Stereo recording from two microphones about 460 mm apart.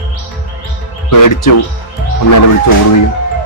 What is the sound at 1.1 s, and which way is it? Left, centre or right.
Speech, left.